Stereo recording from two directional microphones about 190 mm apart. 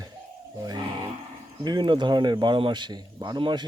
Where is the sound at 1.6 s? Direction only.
25° right (ahead or behind).